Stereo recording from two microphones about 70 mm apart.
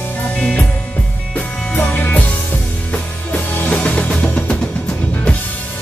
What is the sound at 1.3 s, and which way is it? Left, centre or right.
Music, left.